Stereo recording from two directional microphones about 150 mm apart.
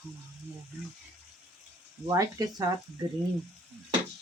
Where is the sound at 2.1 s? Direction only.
25° right (ahead or behind).